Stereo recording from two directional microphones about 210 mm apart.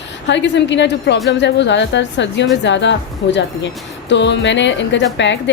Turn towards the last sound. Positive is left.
turn(degrees=60)  # may be behind; listen again after turning